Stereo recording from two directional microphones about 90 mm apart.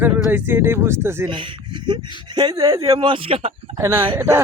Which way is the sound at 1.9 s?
55° right (ahead or behind).